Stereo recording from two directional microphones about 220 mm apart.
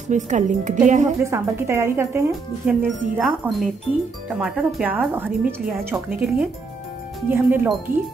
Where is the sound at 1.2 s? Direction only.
10° right (ahead or behind).